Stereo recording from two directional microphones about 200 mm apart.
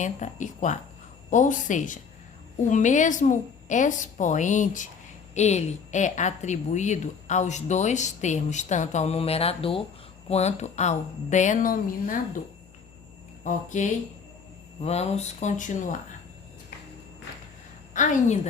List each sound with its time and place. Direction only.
0.0 s a woman's voice: 40° left (ahead or behind)
13.4 s a woman's voice: 40° left (ahead or behind)
17.9 s a woman's voice: 40° left (ahead or behind)